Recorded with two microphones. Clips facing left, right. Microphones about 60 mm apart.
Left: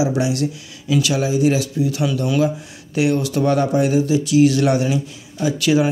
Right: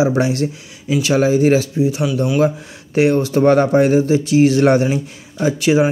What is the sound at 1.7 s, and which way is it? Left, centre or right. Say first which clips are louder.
Speech: right 3 dB; right.